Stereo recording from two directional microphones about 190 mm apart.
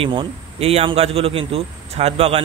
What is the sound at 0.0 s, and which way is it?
A man's voice, 25° right (ahead or behind).